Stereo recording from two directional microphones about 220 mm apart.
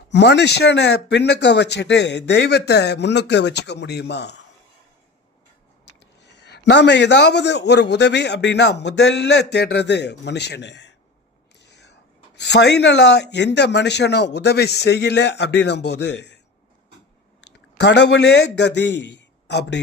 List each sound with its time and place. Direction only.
0.1 s speech: 50° left (ahead or behind)
6.2 s speech: 50° left (ahead or behind)
17.7 s a man's voice: 50° left (ahead or behind)